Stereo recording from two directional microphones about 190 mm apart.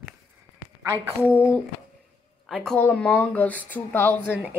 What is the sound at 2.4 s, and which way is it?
Speech, 5° left (ahead or behind).